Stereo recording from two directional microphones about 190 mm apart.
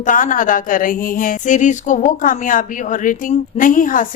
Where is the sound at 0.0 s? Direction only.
45° left (ahead or behind).